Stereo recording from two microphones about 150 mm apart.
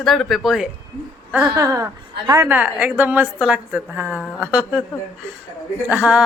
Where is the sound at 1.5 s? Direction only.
20° right (ahead or behind).